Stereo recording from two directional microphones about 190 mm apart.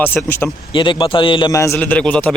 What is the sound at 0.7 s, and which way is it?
A man's voice, 25° left (ahead or behind).